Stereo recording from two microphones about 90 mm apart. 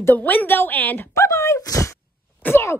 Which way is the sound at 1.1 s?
35° left (ahead or behind).